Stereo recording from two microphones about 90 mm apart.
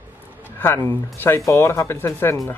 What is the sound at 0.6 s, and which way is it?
Speech, 25° left (ahead or behind).